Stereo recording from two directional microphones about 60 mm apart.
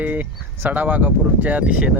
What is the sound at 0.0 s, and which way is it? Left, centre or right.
Speech, right.